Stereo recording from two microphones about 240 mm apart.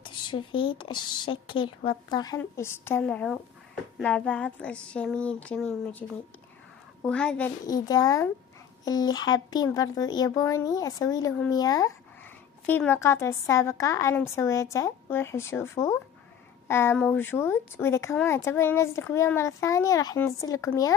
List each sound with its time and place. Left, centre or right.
0.1 s speech: centre
4.0 s a sound: centre
7.0 s speech: centre